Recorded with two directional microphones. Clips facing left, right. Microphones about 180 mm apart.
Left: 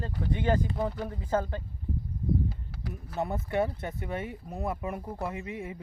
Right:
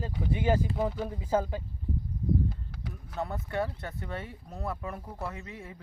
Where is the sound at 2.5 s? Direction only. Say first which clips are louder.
Left 2 dB; centre (ahead or behind).